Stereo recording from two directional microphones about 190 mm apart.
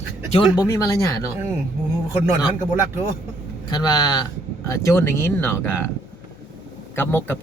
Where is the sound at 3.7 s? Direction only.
20° left (ahead or behind).